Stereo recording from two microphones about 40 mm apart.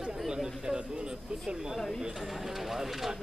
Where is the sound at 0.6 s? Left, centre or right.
Right.